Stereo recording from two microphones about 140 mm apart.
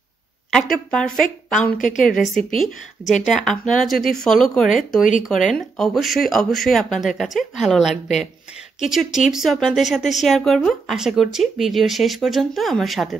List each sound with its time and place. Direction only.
0.5 s speech: 5° left (ahead or behind)
1.8 s a woman's voice: 65° left (ahead or behind)
3.3 s speech: centre (ahead or behind)